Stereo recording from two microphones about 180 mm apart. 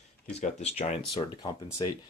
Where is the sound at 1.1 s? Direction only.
25° left (ahead or behind).